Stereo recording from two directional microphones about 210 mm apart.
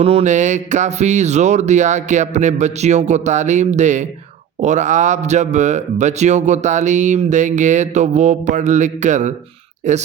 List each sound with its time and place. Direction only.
0.0 s speech: 30° right (ahead or behind)